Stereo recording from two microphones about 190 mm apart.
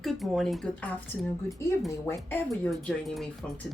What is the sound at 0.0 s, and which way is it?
Speech, centre (ahead or behind).